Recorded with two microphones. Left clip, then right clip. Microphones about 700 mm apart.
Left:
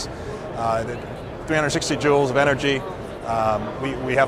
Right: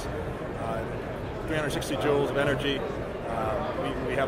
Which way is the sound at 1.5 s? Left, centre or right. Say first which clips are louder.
Left 8 dB; left.